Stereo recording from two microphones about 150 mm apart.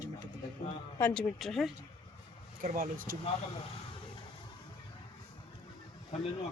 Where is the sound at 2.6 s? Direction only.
70° right (ahead or behind).